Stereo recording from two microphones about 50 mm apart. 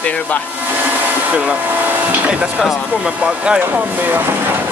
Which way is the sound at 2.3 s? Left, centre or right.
Right.